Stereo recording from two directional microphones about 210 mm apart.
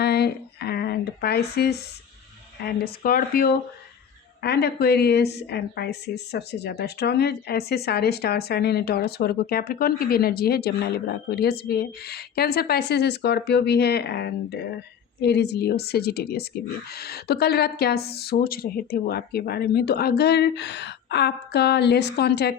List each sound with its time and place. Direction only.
0.0 s a woman's voice: 50° left (ahead or behind)